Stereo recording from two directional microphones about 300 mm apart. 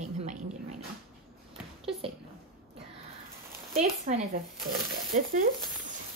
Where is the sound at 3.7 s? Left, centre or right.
Right.